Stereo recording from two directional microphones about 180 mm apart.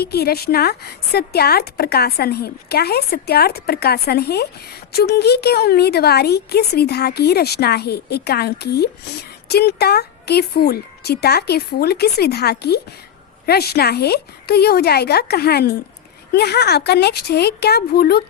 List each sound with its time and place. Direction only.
0.0 s a woman's voice: 60° left (ahead or behind)